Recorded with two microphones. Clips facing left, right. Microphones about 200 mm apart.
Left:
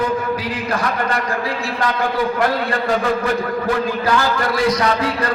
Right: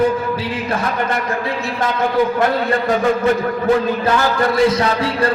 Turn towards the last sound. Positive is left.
turn(degrees=-25)  # may be behind; listen again after turning